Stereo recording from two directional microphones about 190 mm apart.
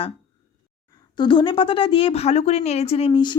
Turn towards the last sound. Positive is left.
turn(degrees=25)  # may be behind; listen again after turning